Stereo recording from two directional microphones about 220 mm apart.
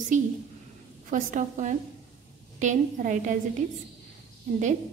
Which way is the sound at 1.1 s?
35° right (ahead or behind).